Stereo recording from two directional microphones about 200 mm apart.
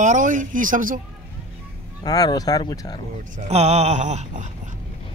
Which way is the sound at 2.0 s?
20° left (ahead or behind).